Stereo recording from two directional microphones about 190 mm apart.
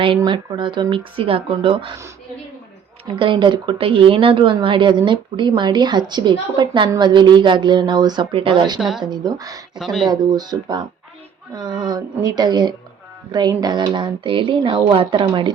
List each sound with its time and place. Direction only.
0.2 s a woman's voice: 25° right (ahead or behind)
3.1 s a woman's voice: 25° right (ahead or behind)
8.8 s speech: 5° right (ahead or behind)
9.0 s a woman's voice: 20° right (ahead or behind)
9.7 s speech: centre (ahead or behind)
10.1 s a woman's voice: 20° right (ahead or behind)